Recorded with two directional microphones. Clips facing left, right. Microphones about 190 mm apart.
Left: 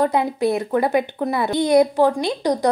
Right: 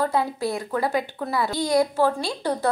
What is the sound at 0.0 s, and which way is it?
A woman's voice, 20° left (ahead or behind).